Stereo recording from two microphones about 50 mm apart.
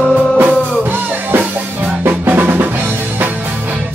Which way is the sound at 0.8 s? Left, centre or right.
Right.